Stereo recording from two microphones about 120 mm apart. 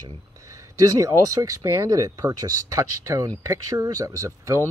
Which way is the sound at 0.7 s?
30° right (ahead or behind).